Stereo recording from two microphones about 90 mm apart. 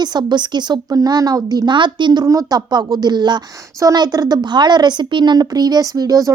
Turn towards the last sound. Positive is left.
turn(degrees=-40)  # may be behind; listen again after turning